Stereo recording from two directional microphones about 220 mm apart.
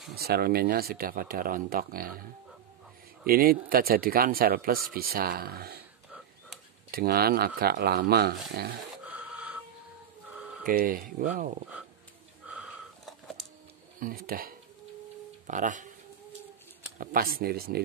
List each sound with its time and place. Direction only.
0.1 s speech: 45° right (ahead or behind)
3.3 s speech: 40° right (ahead or behind)
6.9 s speech: 45° right (ahead or behind)
8.9 s a sound: 5° right (ahead or behind)
10.6 s speech: 40° right (ahead or behind)
12.4 s a sound: centre (ahead or behind)
13.9 s speech: 40° right (ahead or behind)
17.0 s speech: 40° right (ahead or behind)